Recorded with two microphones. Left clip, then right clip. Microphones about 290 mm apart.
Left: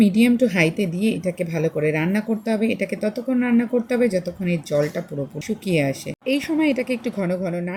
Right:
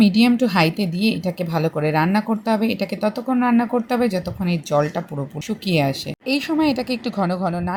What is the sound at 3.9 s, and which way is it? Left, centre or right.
Speech, right.